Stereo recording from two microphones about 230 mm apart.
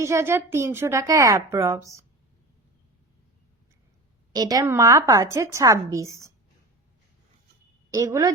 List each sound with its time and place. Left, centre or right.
0.0 s a woman's voice: centre
4.3 s a woman's voice: centre
7.9 s a woman's voice: centre